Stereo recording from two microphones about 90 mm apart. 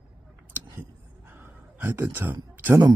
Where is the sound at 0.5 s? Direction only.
25° right (ahead or behind).